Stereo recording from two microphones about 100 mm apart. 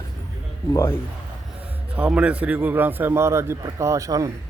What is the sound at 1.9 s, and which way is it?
A man's voice, 10° right (ahead or behind).